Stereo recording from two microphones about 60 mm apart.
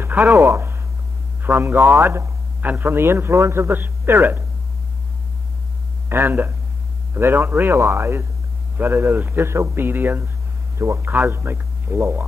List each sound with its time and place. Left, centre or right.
0.2 s a man's voice: right
1.8 s speech: right
2.6 s a man's voice: right
6.0 s a man's voice: right